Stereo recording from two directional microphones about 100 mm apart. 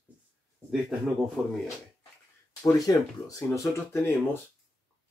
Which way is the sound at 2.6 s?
35° left (ahead or behind).